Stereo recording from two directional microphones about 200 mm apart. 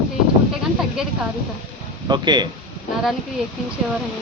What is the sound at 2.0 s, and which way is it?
Speech, 20° right (ahead or behind).